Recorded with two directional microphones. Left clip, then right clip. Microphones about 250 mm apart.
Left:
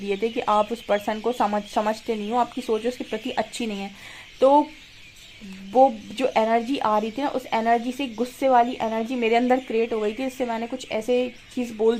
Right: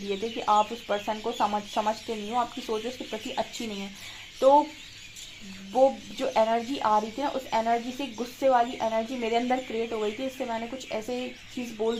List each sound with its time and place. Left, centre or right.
0.1 s speech: left
5.7 s speech: left